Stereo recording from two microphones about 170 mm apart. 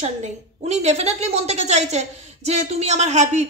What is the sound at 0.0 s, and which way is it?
A woman's voice, 40° right (ahead or behind).